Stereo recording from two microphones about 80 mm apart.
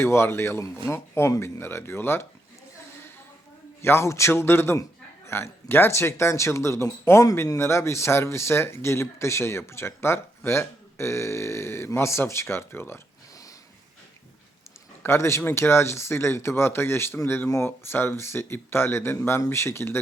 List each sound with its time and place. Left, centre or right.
0.0 s speech: left
3.8 s speech: left
15.0 s speech: left